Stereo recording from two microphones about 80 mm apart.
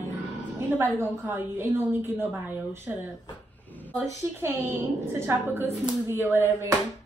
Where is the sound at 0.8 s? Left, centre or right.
Right.